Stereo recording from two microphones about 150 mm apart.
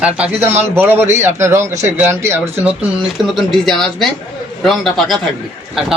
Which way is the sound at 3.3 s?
Centre (ahead or behind).